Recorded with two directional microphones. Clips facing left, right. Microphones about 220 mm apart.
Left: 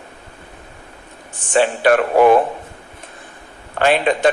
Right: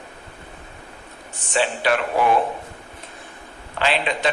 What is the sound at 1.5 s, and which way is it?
Speech, 50° left (ahead or behind).